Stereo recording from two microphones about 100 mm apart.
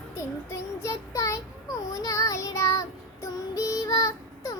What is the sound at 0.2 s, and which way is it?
Child singing, 30° left (ahead or behind).